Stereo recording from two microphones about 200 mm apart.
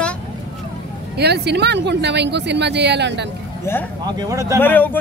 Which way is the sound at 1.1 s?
55° right (ahead or behind).